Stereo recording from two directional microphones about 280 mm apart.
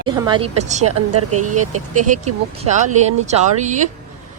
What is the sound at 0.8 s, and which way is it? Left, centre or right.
Speech, right.